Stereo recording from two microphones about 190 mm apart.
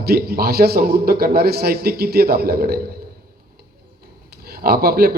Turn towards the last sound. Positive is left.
turn(degrees=-55)  # may be behind; listen again after turning